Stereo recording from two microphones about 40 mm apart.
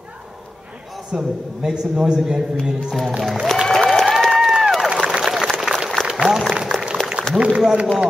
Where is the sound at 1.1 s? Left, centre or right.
Centre.